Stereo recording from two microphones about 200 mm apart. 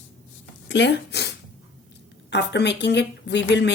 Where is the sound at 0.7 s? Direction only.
60° left (ahead or behind).